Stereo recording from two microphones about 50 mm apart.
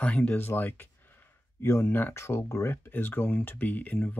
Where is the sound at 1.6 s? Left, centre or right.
Left.